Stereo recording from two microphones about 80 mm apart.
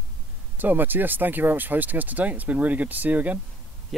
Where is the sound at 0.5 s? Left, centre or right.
Right.